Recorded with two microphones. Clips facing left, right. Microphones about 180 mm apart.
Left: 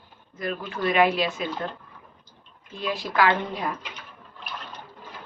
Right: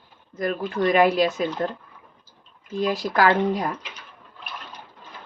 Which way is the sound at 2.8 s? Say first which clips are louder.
Right 3 dB; 40° right (ahead or behind).